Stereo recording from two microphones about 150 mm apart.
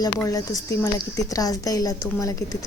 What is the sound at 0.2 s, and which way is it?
A woman's voice, 20° left (ahead or behind).